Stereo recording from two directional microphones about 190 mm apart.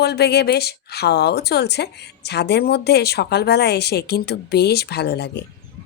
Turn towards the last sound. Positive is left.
turn(degrees=60)  # may be behind; listen again after turning